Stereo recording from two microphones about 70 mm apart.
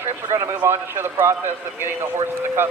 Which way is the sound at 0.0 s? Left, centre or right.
Right.